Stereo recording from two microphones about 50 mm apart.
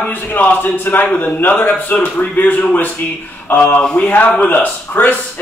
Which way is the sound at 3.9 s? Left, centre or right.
Left.